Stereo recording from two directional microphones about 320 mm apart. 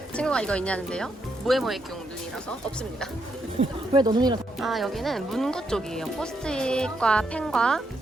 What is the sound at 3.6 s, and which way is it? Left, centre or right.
Speech, centre.